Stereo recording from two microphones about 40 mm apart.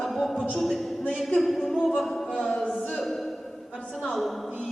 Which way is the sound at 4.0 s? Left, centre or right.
Centre.